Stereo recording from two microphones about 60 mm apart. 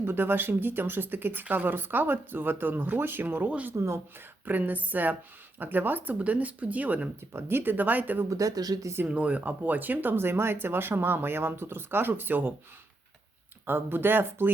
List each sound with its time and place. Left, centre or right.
0.0 s speech: right
3.8 s speech: right
4.4 s speech: right
7.3 s speech: right
8.3 s speech: right
9.0 s speech: right
13.7 s speech: right